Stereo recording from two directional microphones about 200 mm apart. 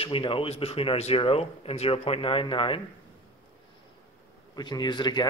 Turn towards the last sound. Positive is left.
turn(degrees=20)  # may be behind; listen again after turning